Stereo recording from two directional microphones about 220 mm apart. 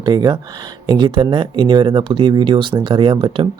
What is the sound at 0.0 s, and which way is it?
Speech, 20° right (ahead or behind).